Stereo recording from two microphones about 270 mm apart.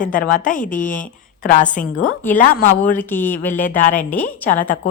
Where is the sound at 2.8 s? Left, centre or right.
Centre.